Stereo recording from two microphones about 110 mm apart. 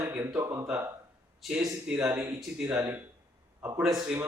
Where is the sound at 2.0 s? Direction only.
25° right (ahead or behind).